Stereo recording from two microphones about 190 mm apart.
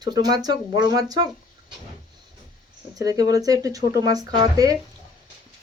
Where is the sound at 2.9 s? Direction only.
20° right (ahead or behind).